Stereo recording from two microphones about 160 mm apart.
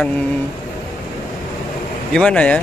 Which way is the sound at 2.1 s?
5° left (ahead or behind).